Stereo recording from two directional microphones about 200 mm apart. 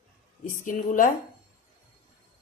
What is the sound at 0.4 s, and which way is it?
Speech, 40° left (ahead or behind).